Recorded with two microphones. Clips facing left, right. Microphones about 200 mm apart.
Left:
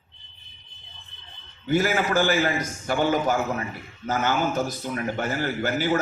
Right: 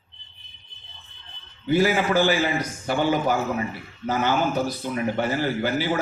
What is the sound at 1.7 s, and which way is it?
A man's voice, 45° left (ahead or behind).